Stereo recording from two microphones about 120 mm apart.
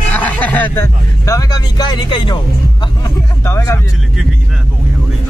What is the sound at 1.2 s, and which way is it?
Speech, 30° left (ahead or behind).